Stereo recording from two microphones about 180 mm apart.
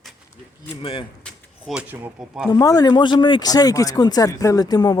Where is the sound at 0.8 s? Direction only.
30° left (ahead or behind).